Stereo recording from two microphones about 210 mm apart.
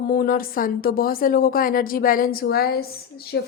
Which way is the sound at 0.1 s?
45° left (ahead or behind).